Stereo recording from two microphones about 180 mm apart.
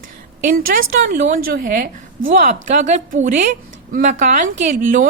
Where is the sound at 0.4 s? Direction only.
55° right (ahead or behind).